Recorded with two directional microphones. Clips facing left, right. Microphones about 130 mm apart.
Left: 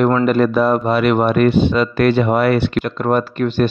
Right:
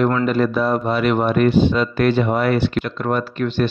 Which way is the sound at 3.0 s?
45° left (ahead or behind).